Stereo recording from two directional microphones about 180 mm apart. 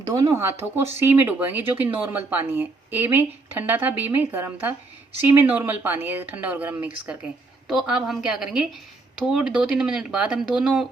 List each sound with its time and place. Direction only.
0.0 s speech: 20° right (ahead or behind)